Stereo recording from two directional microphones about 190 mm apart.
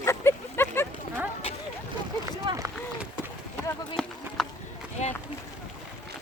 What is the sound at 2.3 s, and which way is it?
Speech, 15° right (ahead or behind).